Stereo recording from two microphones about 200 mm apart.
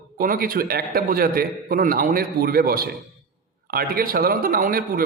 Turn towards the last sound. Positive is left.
turn(degrees=-50)  # may be behind; listen again after turning